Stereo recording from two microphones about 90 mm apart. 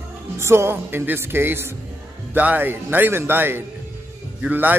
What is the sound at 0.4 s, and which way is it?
A man's voice, 30° right (ahead or behind).